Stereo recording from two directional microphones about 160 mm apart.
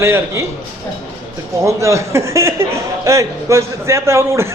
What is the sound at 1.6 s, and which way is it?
A man's voice, 20° right (ahead or behind).